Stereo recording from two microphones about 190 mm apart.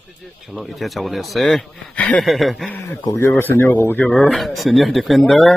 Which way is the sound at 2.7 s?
10° left (ahead or behind).